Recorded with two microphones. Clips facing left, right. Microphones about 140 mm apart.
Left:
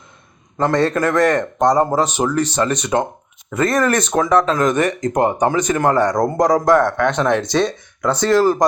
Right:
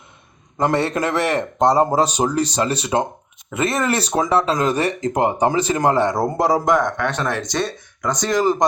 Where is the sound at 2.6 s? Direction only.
30° right (ahead or behind).